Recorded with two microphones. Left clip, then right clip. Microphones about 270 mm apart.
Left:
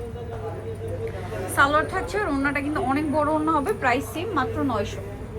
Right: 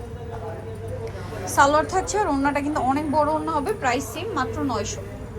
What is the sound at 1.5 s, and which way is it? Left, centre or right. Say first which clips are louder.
A woman's voice: right 2 dB; centre.